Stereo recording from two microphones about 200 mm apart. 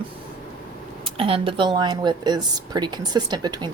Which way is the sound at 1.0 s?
25° right (ahead or behind).